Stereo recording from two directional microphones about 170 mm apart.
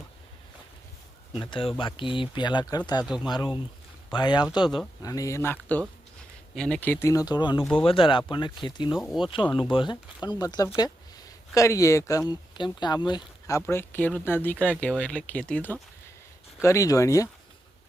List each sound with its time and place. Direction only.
1.3 s speech: 30° left (ahead or behind)
8.9 s speech: centre (ahead or behind)
9.7 s speech: 25° left (ahead or behind)
13.6 s speech: 15° left (ahead or behind)